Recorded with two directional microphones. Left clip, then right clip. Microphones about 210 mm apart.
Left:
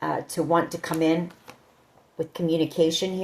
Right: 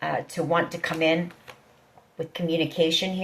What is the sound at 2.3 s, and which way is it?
Speech, 45° left (ahead or behind).